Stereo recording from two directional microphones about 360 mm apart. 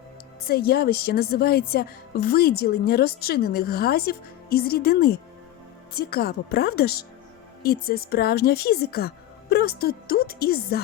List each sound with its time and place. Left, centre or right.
0.4 s a woman's voice: left